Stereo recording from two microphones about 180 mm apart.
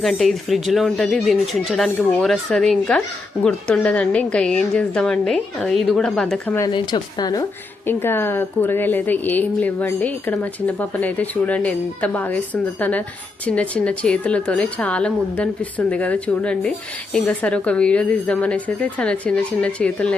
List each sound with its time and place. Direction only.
0.0 s a woman's voice: centre (ahead or behind)
6.6 s speech: 25° left (ahead or behind)
7.9 s a woman's voice: 10° left (ahead or behind)